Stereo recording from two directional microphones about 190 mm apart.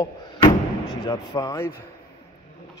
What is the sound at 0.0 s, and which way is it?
Slam, 20° left (ahead or behind).